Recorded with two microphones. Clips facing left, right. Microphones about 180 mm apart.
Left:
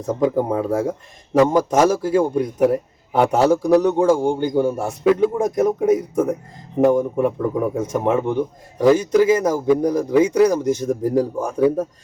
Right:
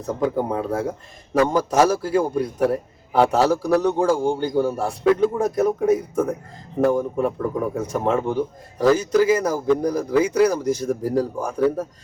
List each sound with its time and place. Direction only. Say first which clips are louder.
0.2 s a man's voice: left 3 dB; 20° left (ahead or behind)